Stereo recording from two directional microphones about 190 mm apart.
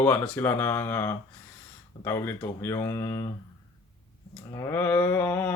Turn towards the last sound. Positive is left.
turn(degrees=10)  # may be behind; listen again after turning